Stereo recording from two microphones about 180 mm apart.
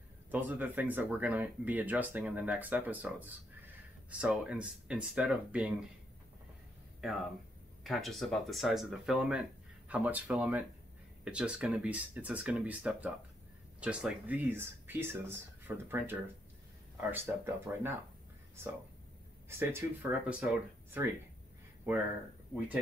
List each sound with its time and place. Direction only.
0.3 s speech: 10° right (ahead or behind)
7.0 s speech: centre (ahead or behind)
19.6 s speech: 15° right (ahead or behind)